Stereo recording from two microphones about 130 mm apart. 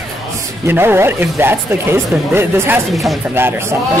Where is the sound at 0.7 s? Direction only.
20° right (ahead or behind).